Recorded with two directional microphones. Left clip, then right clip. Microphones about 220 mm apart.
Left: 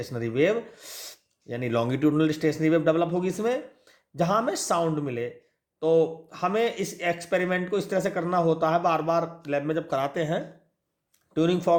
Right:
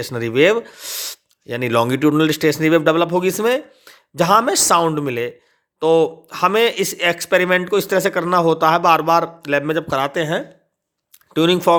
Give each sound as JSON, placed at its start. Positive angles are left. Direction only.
{"t": 0.0, "sound": "speech", "side_deg": -35}
{"t": 11.3, "sound": "speech", "side_deg": -40}